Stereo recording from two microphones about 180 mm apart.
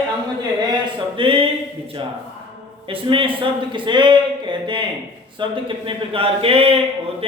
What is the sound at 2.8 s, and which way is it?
Speech, 30° right (ahead or behind).